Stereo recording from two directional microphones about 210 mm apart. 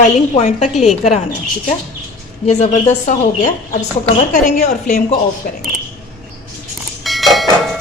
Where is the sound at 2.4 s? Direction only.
30° left (ahead or behind).